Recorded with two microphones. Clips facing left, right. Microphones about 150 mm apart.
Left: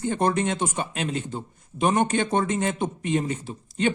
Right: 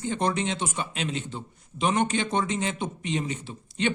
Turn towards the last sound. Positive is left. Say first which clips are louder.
# left 3 dB
turn(degrees=45)  # may be behind; listen again after turning